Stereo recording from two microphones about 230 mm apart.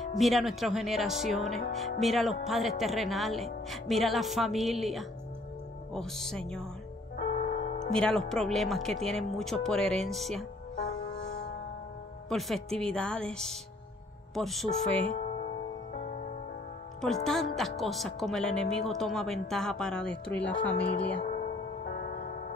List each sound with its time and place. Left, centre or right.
0.1 s speech: centre
7.2 s music: left
7.9 s speech: centre
12.3 s speech: centre
15.0 s music: left
17.0 s speech: centre
20.9 s music: left